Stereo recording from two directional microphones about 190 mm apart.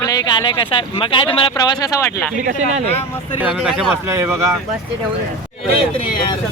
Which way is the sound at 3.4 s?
5° right (ahead or behind).